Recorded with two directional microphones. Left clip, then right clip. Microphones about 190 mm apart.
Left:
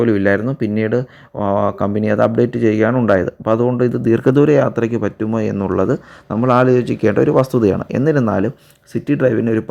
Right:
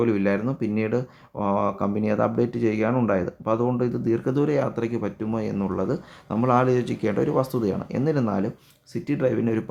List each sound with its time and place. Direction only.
0.0 s speech: 20° left (ahead or behind)